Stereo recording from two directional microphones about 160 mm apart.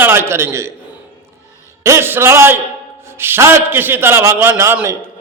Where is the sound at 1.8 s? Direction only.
15° right (ahead or behind).